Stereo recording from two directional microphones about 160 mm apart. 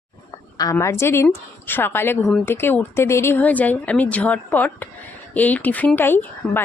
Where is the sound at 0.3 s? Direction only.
25° left (ahead or behind).